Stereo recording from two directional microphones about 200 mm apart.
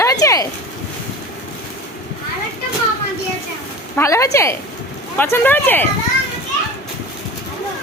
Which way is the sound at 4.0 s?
15° left (ahead or behind).